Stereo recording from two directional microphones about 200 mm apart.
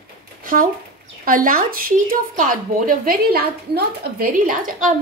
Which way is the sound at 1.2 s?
45° right (ahead or behind).